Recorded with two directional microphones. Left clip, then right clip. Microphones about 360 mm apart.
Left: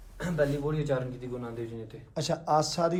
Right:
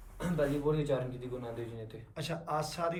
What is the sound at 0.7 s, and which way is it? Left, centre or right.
Speech, left.